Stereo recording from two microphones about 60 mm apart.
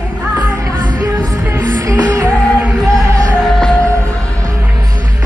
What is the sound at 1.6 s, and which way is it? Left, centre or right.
Music, right.